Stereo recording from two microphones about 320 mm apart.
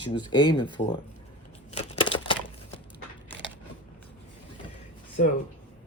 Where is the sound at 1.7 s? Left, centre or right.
Centre.